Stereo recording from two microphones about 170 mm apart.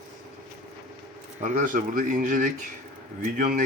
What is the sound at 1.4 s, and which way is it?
Speech, 50° right (ahead or behind).